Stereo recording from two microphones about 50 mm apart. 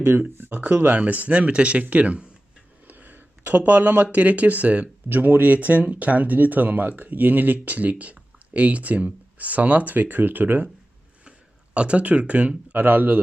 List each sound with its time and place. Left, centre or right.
0.0 s speech: right
2.8 s speech: right
11.3 s a sound: right
12.7 s speech: right